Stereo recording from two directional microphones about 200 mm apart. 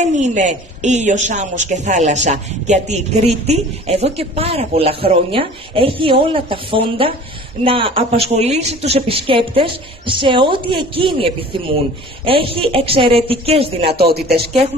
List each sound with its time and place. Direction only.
0.0 s a woman's voice: 35° right (ahead or behind)
14.1 s speech: 50° right (ahead or behind)